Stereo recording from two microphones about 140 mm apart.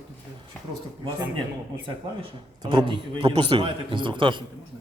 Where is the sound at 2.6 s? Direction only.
35° right (ahead or behind).